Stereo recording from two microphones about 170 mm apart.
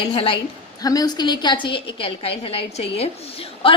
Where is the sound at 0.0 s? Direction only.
30° left (ahead or behind).